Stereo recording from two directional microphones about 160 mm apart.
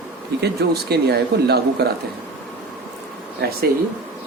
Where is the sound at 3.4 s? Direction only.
90° right.